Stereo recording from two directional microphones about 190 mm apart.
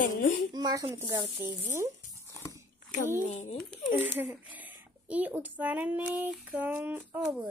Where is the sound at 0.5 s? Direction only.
20° right (ahead or behind).